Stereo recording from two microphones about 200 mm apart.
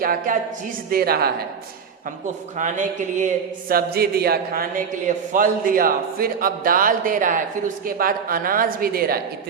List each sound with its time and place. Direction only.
0.0 s a man's voice: 45° right (ahead or behind)
2.6 s a man's voice: 40° right (ahead or behind)